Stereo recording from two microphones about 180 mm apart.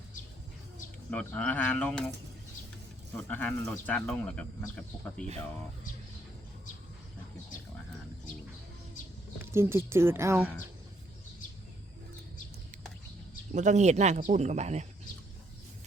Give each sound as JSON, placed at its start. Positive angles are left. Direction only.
{"t": 1.1, "sound": "speech", "side_deg": 5}
{"t": 3.2, "sound": "speech", "side_deg": 5}
{"t": 9.4, "sound": "speech", "side_deg": -15}
{"t": 13.5, "sound": "speech", "side_deg": -40}